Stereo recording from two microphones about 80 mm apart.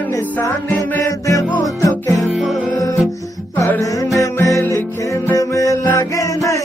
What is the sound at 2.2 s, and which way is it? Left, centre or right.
Music, centre.